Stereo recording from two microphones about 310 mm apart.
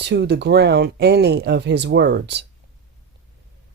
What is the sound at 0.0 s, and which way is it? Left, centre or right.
Speech, right.